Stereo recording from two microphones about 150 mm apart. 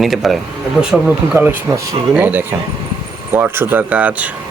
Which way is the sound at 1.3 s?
15° right (ahead or behind).